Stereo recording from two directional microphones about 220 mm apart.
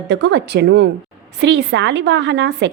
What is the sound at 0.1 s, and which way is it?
A woman's voice, 50° right (ahead or behind).